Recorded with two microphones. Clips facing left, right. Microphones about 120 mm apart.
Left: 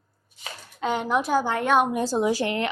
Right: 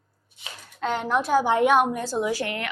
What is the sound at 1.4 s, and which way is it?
Speech, 20° right (ahead or behind).